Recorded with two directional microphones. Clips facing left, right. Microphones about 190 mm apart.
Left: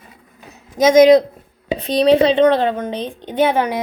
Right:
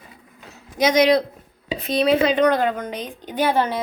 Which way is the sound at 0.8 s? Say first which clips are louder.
Left 7 dB; 45° left (ahead or behind).